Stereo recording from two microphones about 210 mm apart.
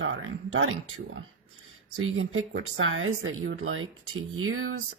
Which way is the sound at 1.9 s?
70° right (ahead or behind).